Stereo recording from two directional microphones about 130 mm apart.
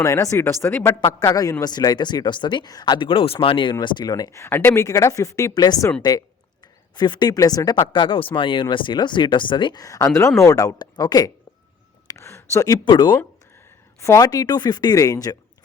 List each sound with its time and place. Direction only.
0.0 s speech: 25° left (ahead or behind)
1.0 s speech: 30° left (ahead or behind)
9.8 s speech: 25° left (ahead or behind)
12.0 s a sound: 20° left (ahead or behind)
14.0 s speech: 25° left (ahead or behind)